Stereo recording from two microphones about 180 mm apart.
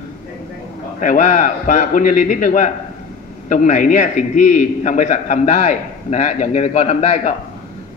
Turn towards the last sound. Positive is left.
turn(degrees=40)  # may be behind; listen again after turning